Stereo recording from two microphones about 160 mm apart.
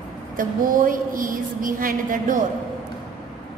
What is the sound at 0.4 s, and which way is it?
A woman's voice, 60° right (ahead or behind).